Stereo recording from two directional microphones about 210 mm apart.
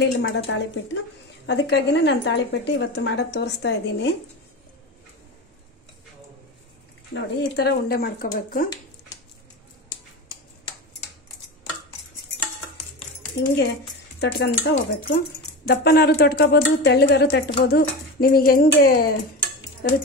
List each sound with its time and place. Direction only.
0.0 s a woman's voice: 60° left (ahead or behind)
7.2 s speech: 50° left (ahead or behind)
14.2 s speech: 50° left (ahead or behind)